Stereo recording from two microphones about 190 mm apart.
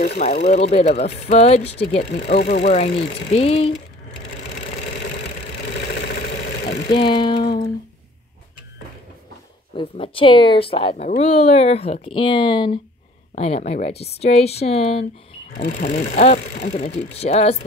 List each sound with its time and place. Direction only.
0.2 s speech: 35° left (ahead or behind)
5.9 s engine: 65° left (ahead or behind)
7.0 s speech: 25° left (ahead or behind)
9.8 s speech: 30° left (ahead or behind)
15.5 s speech: 40° left (ahead or behind)